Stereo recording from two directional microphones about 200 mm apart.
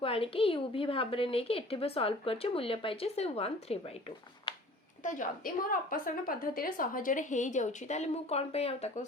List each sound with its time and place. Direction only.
0.0 s a woman's voice: 25° left (ahead or behind)
5.0 s a woman's voice: 40° left (ahead or behind)